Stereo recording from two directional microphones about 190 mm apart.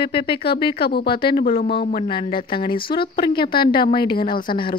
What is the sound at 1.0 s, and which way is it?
Speech, 25° left (ahead or behind).